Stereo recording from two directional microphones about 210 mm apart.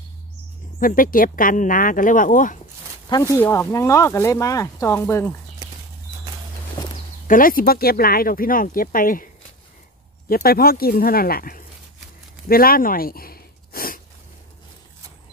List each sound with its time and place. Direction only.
0.7 s speech: 40° left (ahead or behind)
3.1 s speech: 15° left (ahead or behind)
7.2 s speech: 40° left (ahead or behind)
12.4 s a sound: 45° left (ahead or behind)